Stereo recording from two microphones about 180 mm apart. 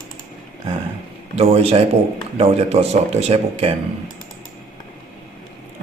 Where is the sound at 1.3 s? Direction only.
35° right (ahead or behind).